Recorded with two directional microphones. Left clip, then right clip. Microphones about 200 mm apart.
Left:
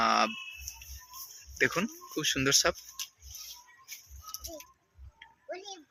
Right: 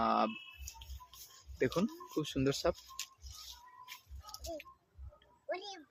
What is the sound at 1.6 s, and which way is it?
Speech, 5° right (ahead or behind).